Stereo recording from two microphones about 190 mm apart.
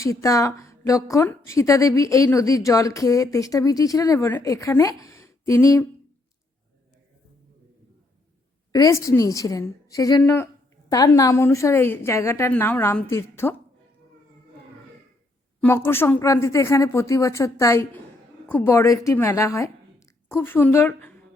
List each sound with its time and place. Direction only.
0.0 s speech: 15° left (ahead or behind)
8.7 s speech: 15° left (ahead or behind)
15.6 s speech: 10° left (ahead or behind)